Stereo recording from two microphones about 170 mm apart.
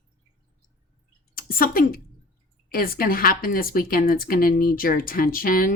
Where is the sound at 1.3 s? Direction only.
60° left (ahead or behind).